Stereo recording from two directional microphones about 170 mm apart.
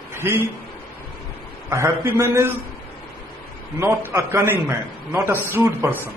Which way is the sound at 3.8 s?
15° right (ahead or behind).